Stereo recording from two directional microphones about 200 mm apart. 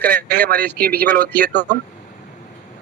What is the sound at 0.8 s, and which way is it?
Speech, 50° right (ahead or behind).